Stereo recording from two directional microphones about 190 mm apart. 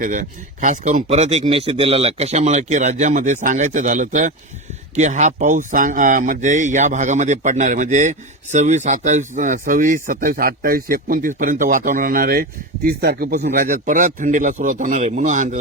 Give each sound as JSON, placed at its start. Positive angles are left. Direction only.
{"t": 0.0, "sound": "speech", "side_deg": -45}